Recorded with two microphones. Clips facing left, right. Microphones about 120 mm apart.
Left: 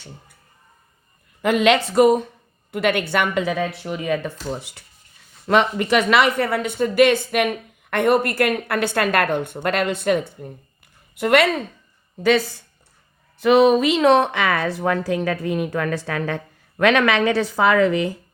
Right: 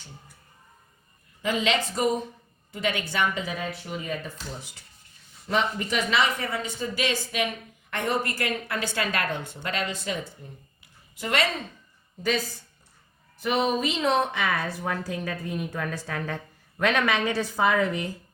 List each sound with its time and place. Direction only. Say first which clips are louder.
1.4 s speech: left 9 dB; 65° left (ahead or behind)
12.2 s a woman's voice: left 9 dB; 75° left (ahead or behind); by 18.1 s 90° left